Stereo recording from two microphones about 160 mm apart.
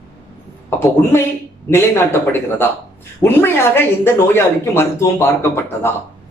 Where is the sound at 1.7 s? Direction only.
15° left (ahead or behind).